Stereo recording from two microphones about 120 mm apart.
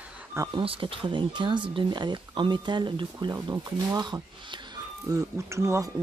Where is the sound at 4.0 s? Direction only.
40° right (ahead or behind).